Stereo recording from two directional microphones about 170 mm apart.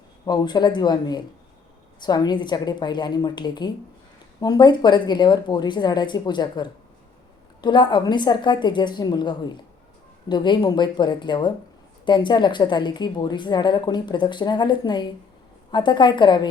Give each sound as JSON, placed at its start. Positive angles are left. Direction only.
{"t": 0.3, "sound": "a woman's voice", "side_deg": 25}